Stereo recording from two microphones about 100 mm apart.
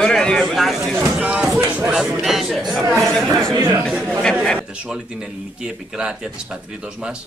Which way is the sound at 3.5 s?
25° right (ahead or behind).